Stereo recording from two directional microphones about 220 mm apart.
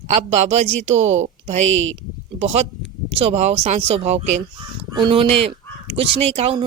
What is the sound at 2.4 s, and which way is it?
Speech, 30° right (ahead or behind).